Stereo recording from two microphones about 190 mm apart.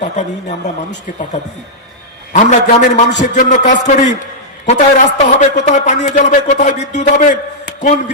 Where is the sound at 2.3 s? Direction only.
40° left (ahead or behind).